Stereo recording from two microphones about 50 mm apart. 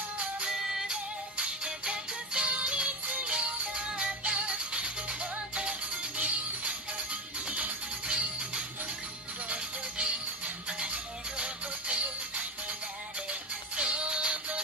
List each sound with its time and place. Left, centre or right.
0.5 s music: centre
1.4 s music: right